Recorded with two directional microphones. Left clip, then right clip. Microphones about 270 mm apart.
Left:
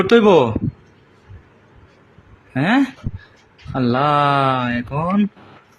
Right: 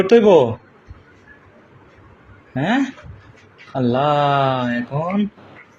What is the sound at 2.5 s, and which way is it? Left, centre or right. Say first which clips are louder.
Speech: left 2 dB; left.